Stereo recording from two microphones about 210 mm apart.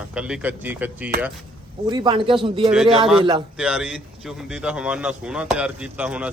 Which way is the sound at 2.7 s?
Centre (ahead or behind).